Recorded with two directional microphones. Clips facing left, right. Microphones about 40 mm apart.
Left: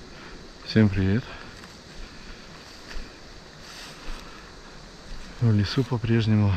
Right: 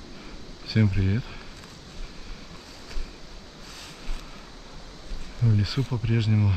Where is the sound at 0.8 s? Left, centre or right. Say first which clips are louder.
Left 4 dB; centre.